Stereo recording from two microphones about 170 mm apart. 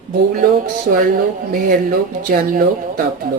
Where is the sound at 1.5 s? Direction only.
55° right (ahead or behind).